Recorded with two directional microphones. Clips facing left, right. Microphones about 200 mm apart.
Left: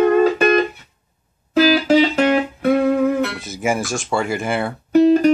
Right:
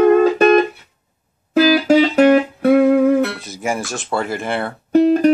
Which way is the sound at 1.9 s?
45° right (ahead or behind).